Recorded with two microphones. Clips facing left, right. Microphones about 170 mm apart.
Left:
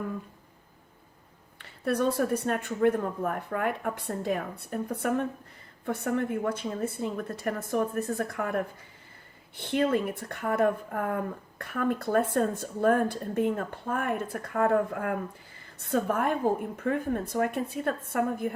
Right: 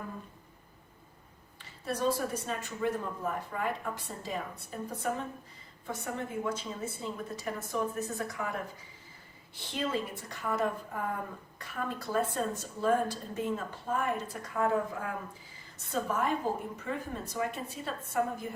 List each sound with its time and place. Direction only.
1.5 s a woman's voice: 60° left (ahead or behind)